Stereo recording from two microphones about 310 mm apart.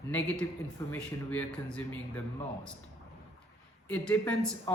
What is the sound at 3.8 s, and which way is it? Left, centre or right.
Speech, centre.